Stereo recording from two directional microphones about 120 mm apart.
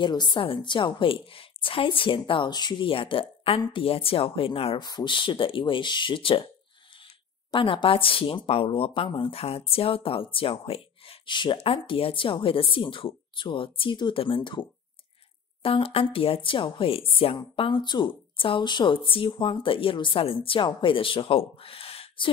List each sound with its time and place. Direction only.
0.0 s speech: 40° left (ahead or behind)
7.5 s speech: 45° left (ahead or behind)